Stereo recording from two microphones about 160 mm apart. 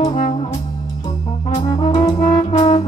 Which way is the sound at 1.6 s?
25° left (ahead or behind).